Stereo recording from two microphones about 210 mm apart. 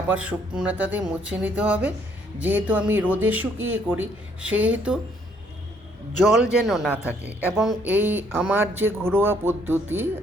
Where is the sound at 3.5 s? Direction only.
75° right (ahead or behind).